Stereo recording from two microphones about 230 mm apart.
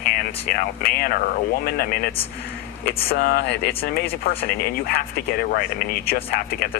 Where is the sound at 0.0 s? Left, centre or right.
Left.